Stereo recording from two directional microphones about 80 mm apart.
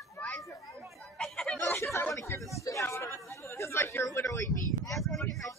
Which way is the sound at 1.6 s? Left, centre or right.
Left.